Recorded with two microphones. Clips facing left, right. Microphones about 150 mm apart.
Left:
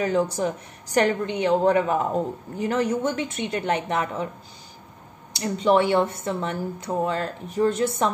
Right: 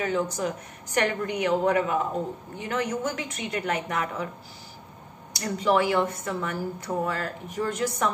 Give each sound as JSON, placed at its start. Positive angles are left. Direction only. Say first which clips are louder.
{"t": 0.0, "sound": "speech", "louder": "left 4 dB", "side_deg": 35}
{"t": 5.3, "sound": "speech", "louder": "left 4 dB", "side_deg": 25}